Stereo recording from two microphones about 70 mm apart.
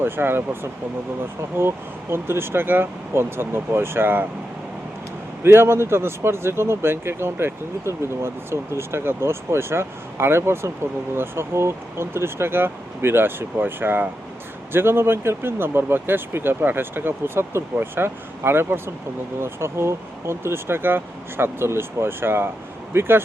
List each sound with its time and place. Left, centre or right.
0.0 s speech: right
5.4 s speech: right